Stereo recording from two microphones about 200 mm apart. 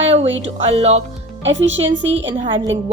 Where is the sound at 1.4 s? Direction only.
70° right (ahead or behind).